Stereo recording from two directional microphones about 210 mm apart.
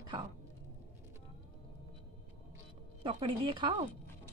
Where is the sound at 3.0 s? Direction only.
25° right (ahead or behind).